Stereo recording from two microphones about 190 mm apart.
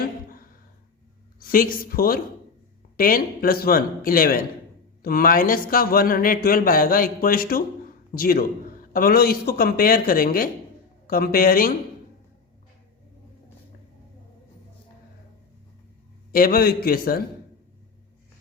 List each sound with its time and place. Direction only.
1.4 s a woman's voice: 50° left (ahead or behind)
16.3 s speech: 50° left (ahead or behind)